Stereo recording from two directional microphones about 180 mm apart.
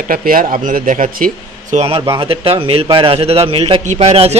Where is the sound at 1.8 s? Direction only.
30° right (ahead or behind).